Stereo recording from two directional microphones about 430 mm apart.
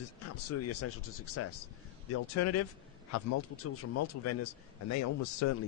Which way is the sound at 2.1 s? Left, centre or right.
Left.